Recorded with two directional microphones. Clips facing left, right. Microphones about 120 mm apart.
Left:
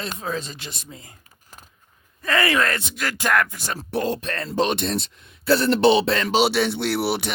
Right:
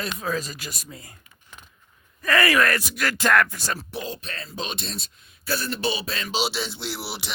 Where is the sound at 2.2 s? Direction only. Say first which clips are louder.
Even; 20° left (ahead or behind).